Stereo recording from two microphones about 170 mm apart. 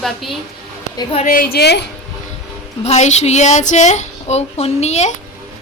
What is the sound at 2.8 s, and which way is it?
A woman's voice, 40° left (ahead or behind).